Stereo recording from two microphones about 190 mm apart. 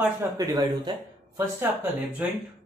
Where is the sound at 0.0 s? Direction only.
10° right (ahead or behind).